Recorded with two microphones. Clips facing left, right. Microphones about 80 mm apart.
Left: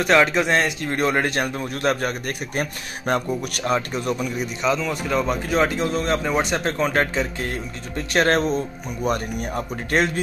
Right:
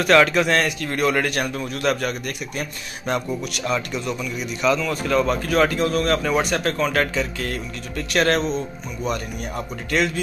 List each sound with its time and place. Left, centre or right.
0.0 s speech: centre; by 4.5 s left
4.6 s speech: centre
9.0 s speech: left